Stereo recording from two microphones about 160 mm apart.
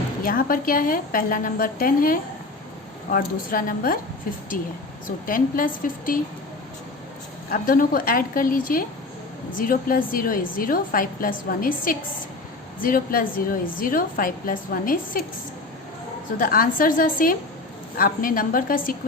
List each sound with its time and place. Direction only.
0.2 s a woman's voice: 65° left (ahead or behind)
7.5 s a woman's voice: 60° left (ahead or behind)
16.4 s a woman's voice: 60° left (ahead or behind)